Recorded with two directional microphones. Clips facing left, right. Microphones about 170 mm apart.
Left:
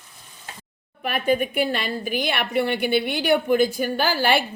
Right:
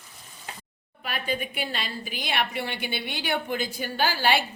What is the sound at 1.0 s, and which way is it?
A woman's voice, 50° left (ahead or behind).